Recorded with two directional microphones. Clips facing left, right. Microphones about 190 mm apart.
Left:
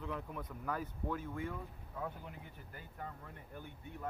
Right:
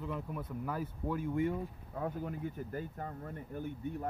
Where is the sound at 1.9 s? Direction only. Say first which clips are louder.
Right 7 dB; 45° right (ahead or behind).